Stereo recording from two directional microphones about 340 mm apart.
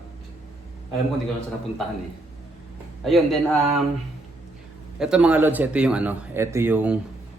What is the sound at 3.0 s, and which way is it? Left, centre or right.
Speech, centre.